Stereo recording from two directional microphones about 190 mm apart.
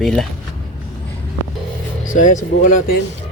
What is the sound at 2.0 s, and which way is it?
Speech, 40° left (ahead or behind).